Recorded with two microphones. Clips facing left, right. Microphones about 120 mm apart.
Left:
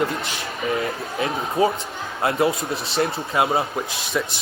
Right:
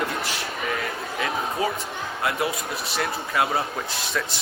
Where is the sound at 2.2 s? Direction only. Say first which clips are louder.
Left 6 dB; 25° left (ahead or behind).